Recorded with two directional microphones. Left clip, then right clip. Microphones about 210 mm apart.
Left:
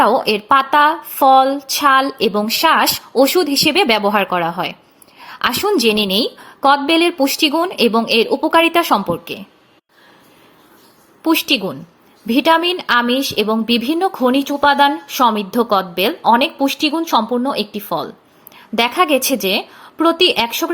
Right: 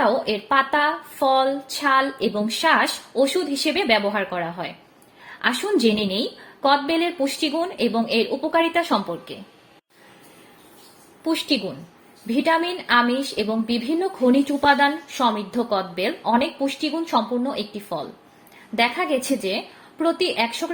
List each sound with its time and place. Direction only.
0.0 s a woman's voice: 25° left (ahead or behind)
5.8 s a woman's voice: 25° left (ahead or behind)
11.2 s a woman's voice: 30° left (ahead or behind)